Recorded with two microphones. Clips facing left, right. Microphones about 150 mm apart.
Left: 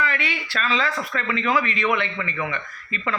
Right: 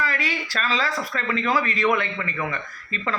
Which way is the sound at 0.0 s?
35° right (ahead or behind).